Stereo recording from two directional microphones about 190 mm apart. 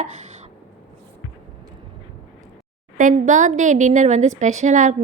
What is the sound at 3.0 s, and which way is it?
A woman's voice, 45° right (ahead or behind).